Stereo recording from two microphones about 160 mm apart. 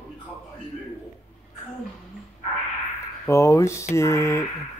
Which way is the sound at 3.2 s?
20° left (ahead or behind).